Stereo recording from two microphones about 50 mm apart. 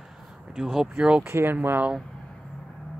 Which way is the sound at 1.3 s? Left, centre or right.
Right.